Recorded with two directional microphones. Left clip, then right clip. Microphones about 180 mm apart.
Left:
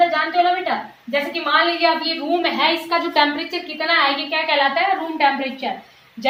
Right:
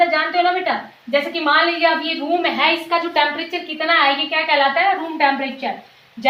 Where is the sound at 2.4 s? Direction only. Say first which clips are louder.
Right 2 dB; 20° left (ahead or behind).